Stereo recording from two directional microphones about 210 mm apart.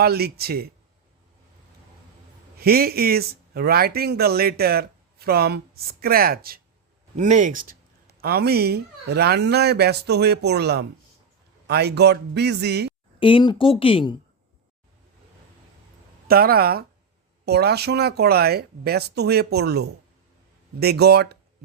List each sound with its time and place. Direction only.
0.0 s speech: 50° right (ahead or behind)
2.6 s speech: 45° right (ahead or behind)
13.1 s speech: 25° left (ahead or behind)
16.2 s speech: 45° right (ahead or behind)